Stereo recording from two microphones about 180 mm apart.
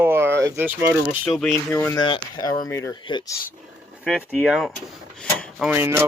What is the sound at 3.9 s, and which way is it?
Speech, 5° right (ahead or behind).